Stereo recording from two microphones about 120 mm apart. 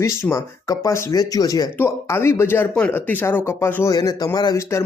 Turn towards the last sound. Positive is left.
turn(degrees=25)  # may be behind; listen again after turning